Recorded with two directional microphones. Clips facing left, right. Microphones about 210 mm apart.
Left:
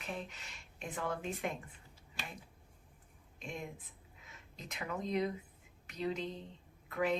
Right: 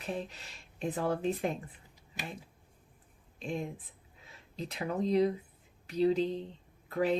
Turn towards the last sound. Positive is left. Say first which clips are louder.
# right 4 dB
turn(degrees=-35)  # may be behind; listen again after turning